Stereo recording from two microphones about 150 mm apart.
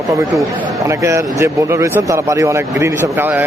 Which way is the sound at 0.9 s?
20° right (ahead or behind).